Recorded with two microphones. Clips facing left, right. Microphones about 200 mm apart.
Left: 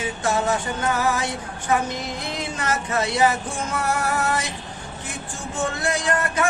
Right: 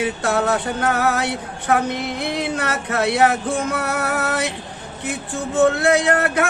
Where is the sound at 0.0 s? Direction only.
60° right (ahead or behind).